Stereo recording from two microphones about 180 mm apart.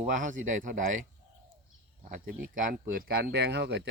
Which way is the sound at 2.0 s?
50° right (ahead or behind).